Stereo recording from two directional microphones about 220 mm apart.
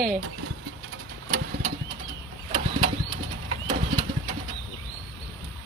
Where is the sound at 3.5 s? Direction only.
25° right (ahead or behind).